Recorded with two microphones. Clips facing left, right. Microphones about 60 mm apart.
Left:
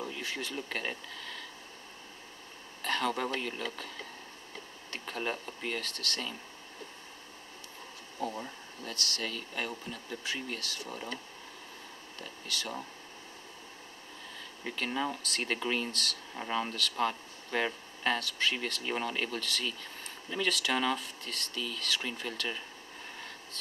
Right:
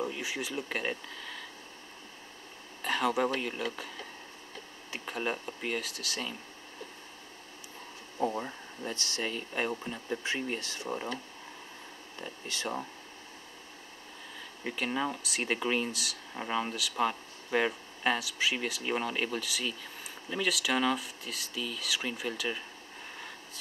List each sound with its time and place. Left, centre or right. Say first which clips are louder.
0.0 s speech: right 3 dB; centre
2.8 s speech: right 3 dB; centre
4.9 s speech: right 2 dB; centre
8.2 s speech: right 5 dB; right
12.2 s speech: right 1 dB; right
14.6 s speech: right 1 dB; centre